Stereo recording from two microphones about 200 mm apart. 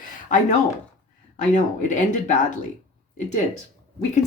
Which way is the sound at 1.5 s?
40° left (ahead or behind).